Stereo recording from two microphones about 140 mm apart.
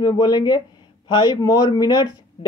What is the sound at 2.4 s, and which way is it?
Speech, 40° left (ahead or behind).